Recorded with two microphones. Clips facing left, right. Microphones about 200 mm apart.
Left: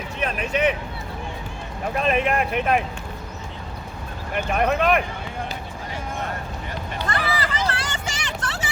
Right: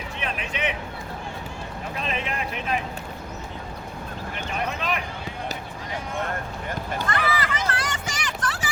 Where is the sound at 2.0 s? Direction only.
55° left (ahead or behind).